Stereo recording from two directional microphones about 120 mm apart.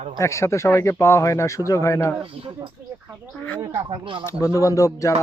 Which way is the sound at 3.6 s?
40° right (ahead or behind).